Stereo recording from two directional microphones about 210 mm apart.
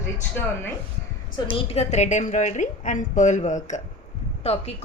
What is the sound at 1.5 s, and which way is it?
A woman's voice, 30° left (ahead or behind).